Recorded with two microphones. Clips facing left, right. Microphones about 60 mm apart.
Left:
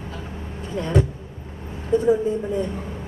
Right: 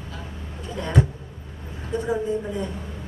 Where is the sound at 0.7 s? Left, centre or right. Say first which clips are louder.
Left 3 dB; left.